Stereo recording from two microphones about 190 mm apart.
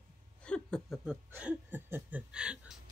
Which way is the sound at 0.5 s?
5° left (ahead or behind).